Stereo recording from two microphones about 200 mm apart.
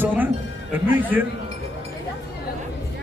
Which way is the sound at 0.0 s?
10° right (ahead or behind).